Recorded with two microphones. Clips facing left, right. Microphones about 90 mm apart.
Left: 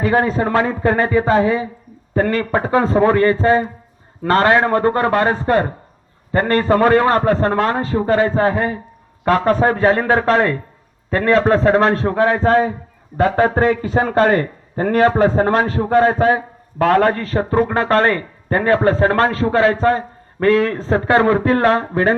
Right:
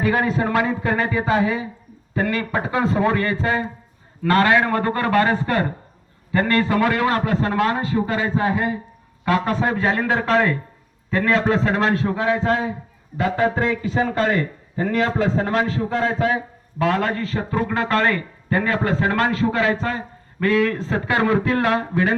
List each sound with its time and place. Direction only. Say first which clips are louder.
0.0 s a man's voice: left 4 dB; 35° left (ahead or behind)